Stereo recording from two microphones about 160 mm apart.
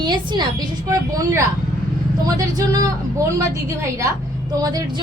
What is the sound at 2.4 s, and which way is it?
A woman's voice, 20° right (ahead or behind).